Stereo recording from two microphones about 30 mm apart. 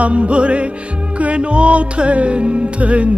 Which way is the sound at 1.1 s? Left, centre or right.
Right.